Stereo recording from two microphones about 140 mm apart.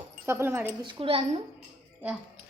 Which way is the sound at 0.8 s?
35° right (ahead or behind).